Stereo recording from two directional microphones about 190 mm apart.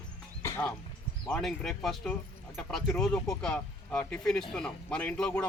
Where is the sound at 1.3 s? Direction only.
Centre (ahead or behind).